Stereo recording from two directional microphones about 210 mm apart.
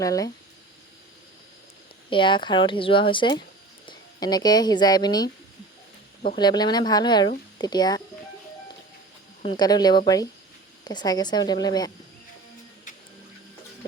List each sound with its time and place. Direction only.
0.0 s speech: 15° left (ahead or behind)
2.0 s speech: 25° left (ahead or behind)
6.3 s speech: 20° left (ahead or behind)
9.4 s speech: 20° left (ahead or behind)